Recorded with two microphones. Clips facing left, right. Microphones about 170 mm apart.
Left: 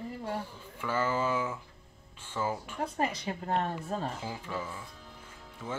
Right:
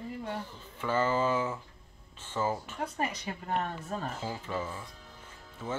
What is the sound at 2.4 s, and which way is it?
Speech, 10° right (ahead or behind).